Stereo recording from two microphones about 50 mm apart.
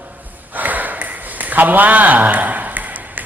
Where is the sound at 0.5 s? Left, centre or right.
Right.